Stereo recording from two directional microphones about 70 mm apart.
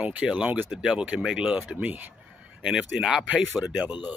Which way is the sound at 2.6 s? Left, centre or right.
Centre.